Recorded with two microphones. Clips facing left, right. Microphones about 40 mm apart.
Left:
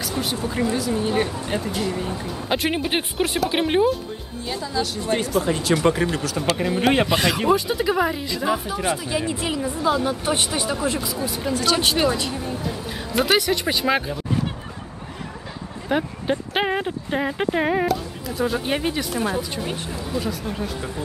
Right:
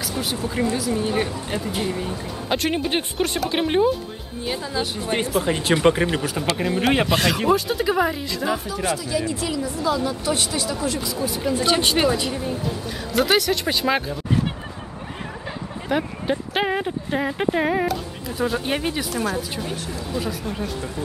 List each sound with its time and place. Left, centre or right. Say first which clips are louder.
0.0 s speech: left 1 dB; centre
1.7 s speech: even; centre
2.0 s speech: left 1 dB; centre
4.5 s speech: even; right
6.5 s speech: left 1 dB; centre
8.9 s speech: even; left
11.1 s speech: right 1 dB; centre
11.5 s speech: even; right
12.1 s speech: right 1 dB; centre
15.9 s speech: even; centre
19.6 s speech: left 1 dB; left
20.2 s speech: even; centre